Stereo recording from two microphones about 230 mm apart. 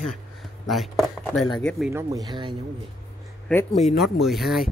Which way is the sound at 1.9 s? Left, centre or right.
Centre.